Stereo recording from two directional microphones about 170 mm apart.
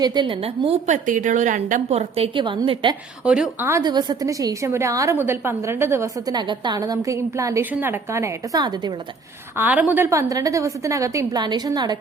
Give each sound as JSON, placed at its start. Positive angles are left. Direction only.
{"t": 0.0, "sound": "a woman's voice", "side_deg": -25}
{"t": 1.0, "sound": "a woman's voice", "side_deg": -45}
{"t": 3.2, "sound": "a woman's voice", "side_deg": -5}
{"t": 3.7, "sound": "a woman's voice", "side_deg": -20}
{"t": 6.3, "sound": "a woman's voice", "side_deg": -25}
{"t": 9.6, "sound": "a woman's voice", "side_deg": -10}